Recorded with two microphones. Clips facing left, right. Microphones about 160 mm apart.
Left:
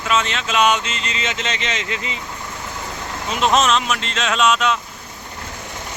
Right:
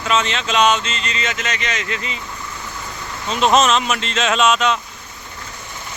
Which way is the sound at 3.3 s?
Centre (ahead or behind).